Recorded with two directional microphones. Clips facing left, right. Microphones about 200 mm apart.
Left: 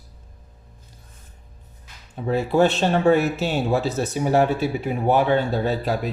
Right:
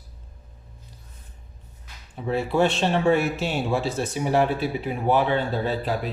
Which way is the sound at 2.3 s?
40° left (ahead or behind).